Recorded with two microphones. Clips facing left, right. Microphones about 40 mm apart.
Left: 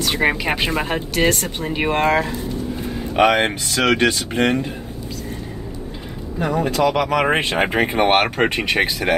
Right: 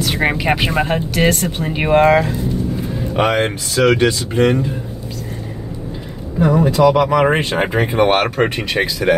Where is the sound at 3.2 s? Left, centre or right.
Left.